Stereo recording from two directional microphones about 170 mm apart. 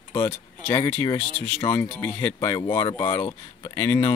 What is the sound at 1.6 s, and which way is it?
Speech, 15° left (ahead or behind).